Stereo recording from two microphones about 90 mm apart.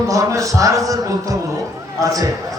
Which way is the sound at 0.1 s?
35° right (ahead or behind).